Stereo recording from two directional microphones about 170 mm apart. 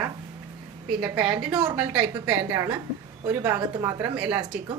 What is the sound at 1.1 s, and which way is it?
A woman's voice, 5° right (ahead or behind).